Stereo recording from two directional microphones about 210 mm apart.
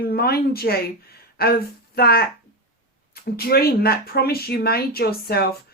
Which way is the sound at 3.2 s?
45° left (ahead or behind).